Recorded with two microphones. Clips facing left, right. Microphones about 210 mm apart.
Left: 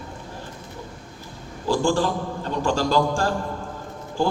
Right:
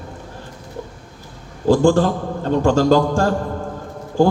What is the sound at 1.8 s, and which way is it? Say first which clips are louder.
Speech: right 7 dB; 50° right (ahead or behind).